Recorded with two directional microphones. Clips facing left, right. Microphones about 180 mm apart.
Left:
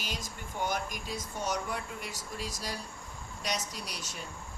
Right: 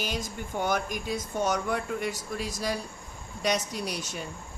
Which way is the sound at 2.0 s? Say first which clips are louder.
Right 8 dB; 60° right (ahead or behind).